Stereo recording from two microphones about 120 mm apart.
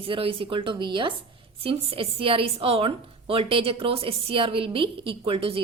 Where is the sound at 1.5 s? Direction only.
50° right (ahead or behind).